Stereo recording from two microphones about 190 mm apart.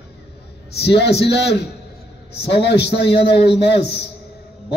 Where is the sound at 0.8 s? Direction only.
60° left (ahead or behind).